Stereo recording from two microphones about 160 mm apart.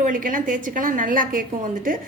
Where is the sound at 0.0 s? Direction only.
55° right (ahead or behind).